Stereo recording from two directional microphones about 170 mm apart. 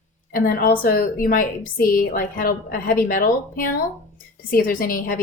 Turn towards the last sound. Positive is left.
turn(degrees=55)  # may be behind; listen again after turning